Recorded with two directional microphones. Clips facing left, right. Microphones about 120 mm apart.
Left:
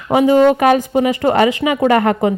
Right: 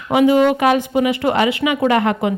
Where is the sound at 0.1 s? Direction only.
35° left (ahead or behind).